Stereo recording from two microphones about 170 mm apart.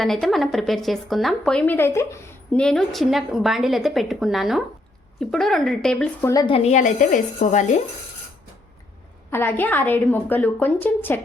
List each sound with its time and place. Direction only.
0.0 s a woman's voice: centre (ahead or behind)
6.2 s speech: 25° left (ahead or behind)
6.6 s a woman's voice: 45° left (ahead or behind)
9.3 s a woman's voice: 15° left (ahead or behind)